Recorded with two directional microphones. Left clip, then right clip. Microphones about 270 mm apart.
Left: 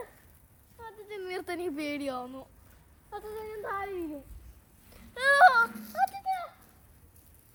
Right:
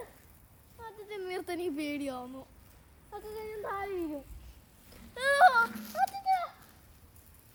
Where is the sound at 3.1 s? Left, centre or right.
Centre.